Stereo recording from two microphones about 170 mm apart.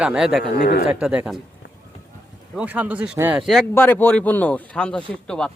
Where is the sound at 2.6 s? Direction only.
10° right (ahead or behind).